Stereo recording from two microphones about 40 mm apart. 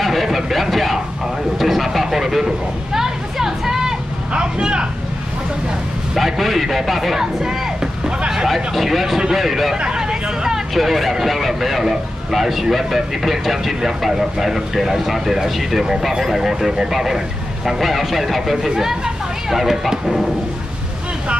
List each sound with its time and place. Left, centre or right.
0.0 s a sound: centre
4.3 s vehicle: right
6.1 s speech: centre
9.8 s vehicle: right
10.7 s speech: centre